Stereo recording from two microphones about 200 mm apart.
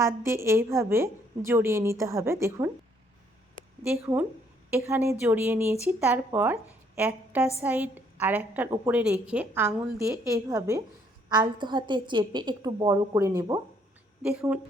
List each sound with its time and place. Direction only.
0.0 s a woman's voice: 15° right (ahead or behind)
3.8 s a woman's voice: 10° right (ahead or behind)
14.2 s a woman's voice: 5° right (ahead or behind)